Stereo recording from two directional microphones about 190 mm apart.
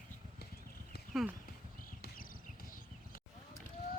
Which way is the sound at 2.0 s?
45° left (ahead or behind).